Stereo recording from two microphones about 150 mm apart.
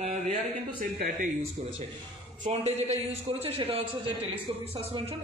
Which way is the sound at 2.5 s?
45° right (ahead or behind).